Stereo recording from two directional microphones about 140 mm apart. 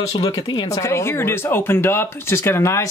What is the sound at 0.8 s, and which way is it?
Speech, 20° left (ahead or behind).